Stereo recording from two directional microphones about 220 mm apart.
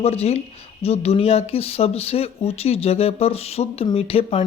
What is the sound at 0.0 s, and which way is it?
Speech, 30° left (ahead or behind).